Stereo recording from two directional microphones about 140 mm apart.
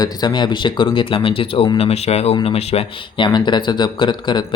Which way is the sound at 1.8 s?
50° left (ahead or behind).